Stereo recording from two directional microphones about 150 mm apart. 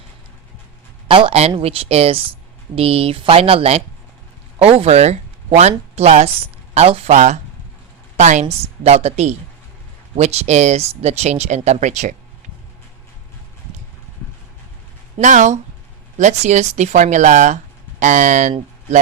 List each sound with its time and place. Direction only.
1.0 s a woman's voice: 35° right (ahead or behind)
15.2 s speech: 55° right (ahead or behind)